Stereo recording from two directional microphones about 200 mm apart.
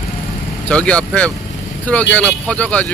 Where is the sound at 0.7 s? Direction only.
5° left (ahead or behind).